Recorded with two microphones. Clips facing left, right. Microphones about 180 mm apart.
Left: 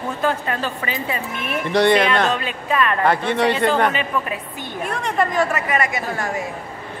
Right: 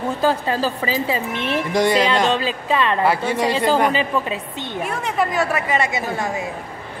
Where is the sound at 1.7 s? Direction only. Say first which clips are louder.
Left 3 dB; 10° right (ahead or behind).